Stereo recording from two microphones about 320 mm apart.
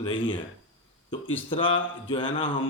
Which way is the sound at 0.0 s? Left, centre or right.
Centre.